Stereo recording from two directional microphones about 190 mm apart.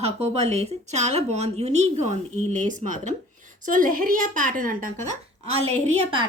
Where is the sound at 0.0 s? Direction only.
35° right (ahead or behind).